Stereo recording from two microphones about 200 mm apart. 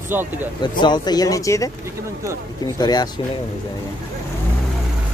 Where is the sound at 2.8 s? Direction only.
20° left (ahead or behind).